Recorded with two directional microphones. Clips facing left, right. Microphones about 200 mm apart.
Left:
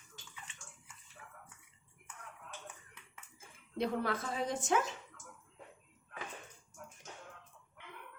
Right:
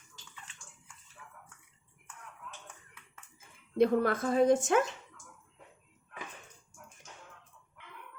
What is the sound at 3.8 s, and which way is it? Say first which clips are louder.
Speech: right 9 dB; 50° right (ahead or behind).